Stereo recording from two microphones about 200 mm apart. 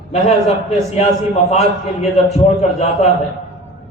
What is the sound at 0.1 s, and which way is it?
A man's voice, 30° left (ahead or behind).